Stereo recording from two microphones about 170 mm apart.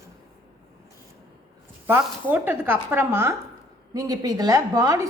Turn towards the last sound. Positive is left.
turn(degrees=-20)  # may be behind; listen again after turning